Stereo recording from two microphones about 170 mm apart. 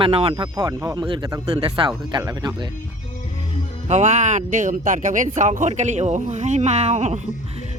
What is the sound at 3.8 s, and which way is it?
Speech, 45° right (ahead or behind).